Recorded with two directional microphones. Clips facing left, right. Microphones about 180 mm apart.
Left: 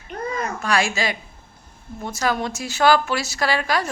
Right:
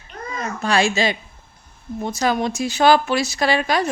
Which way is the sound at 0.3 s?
25° right (ahead or behind).